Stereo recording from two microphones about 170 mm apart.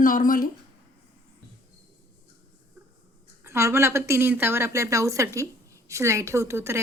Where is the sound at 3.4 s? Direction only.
15° right (ahead or behind).